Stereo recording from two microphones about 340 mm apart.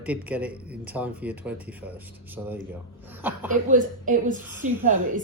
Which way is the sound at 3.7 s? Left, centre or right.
Right.